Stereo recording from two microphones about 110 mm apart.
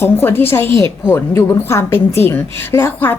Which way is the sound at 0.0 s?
20° left (ahead or behind).